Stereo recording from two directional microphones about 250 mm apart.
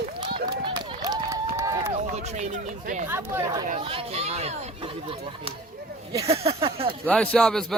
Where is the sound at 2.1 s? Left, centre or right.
Right.